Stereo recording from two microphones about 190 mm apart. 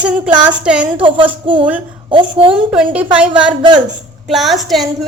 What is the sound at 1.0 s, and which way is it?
Speech, 25° right (ahead or behind).